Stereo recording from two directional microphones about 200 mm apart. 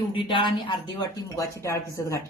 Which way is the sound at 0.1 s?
25° left (ahead or behind).